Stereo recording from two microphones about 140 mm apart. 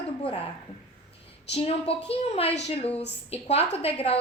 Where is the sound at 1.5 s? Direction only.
45° left (ahead or behind).